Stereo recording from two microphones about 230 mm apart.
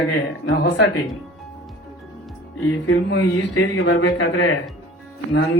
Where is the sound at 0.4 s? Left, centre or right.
Left.